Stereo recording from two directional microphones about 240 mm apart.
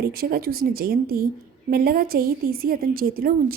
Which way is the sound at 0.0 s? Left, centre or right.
Right.